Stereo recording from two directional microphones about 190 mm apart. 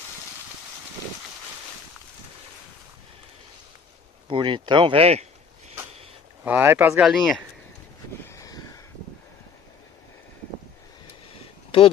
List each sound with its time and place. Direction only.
4.3 s speech: 25° right (ahead or behind)
6.4 s speech: 10° right (ahead or behind)
8.2 s vehicle: 15° left (ahead or behind)